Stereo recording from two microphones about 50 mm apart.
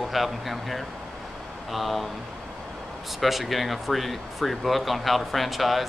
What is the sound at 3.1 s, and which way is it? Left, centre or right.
Speech, centre.